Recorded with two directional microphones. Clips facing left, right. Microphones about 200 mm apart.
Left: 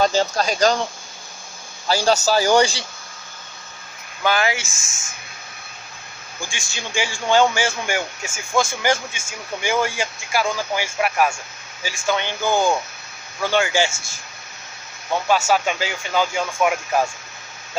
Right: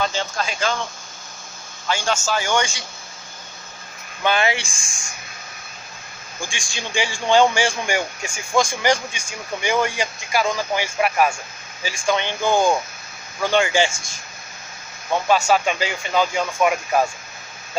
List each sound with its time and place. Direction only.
0.0 s a man's voice: 40° left (ahead or behind)
1.9 s a man's voice: 35° left (ahead or behind)
4.2 s speech: 5° left (ahead or behind)
6.5 s speech: 5° left (ahead or behind)
15.3 s speech: 5° left (ahead or behind)